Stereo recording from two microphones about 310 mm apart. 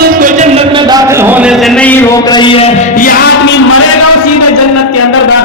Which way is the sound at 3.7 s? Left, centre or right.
Left.